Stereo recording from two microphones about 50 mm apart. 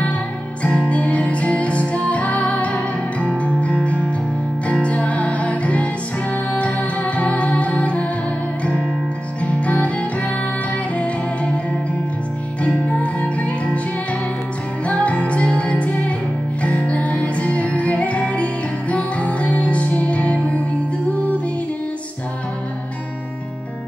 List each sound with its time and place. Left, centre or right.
0.7 s music: left
9.4 s music: left
12.6 s music: left
14.9 s music: left